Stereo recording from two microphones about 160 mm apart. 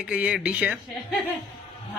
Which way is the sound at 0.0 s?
5° right (ahead or behind).